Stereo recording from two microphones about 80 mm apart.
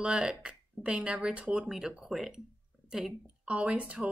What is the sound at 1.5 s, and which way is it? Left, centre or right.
A woman's voice, centre.